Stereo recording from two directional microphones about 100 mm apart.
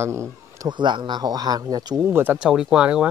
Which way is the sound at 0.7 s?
50° right (ahead or behind).